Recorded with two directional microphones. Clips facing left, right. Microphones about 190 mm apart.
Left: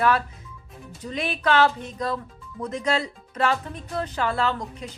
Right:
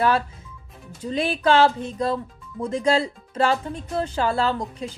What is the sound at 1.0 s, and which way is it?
Speech, 30° right (ahead or behind).